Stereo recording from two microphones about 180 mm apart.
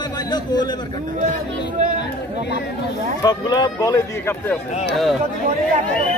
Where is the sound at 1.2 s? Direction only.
45° right (ahead or behind).